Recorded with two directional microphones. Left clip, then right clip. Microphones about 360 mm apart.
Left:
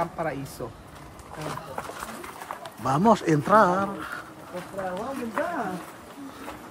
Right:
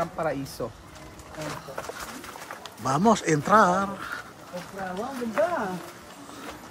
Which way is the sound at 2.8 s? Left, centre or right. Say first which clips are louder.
Left 1 dB; centre.